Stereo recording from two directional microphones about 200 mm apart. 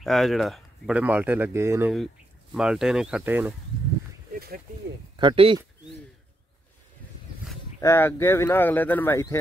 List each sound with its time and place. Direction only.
0.0 s speech: centre (ahead or behind)
5.1 s speech: 25° right (ahead or behind)
7.8 s speech: 10° left (ahead or behind)